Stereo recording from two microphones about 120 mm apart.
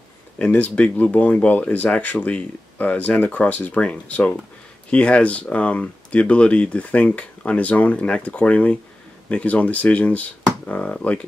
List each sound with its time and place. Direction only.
0.4 s speech: 10° left (ahead or behind)